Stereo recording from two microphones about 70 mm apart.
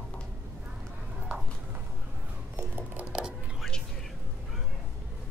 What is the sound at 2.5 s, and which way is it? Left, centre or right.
Music, right.